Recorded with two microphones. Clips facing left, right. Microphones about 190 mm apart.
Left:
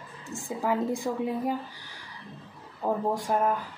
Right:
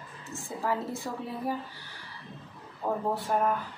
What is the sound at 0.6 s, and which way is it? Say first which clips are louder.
Speech: left 5 dB; 15° left (ahead or behind).